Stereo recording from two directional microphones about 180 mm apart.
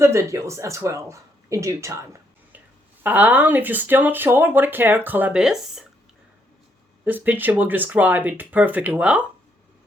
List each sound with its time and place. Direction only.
0.0 s speech: 15° right (ahead or behind)
7.0 s speech: 10° right (ahead or behind)